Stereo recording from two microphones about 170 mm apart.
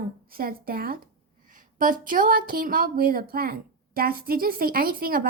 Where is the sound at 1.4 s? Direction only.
55° right (ahead or behind).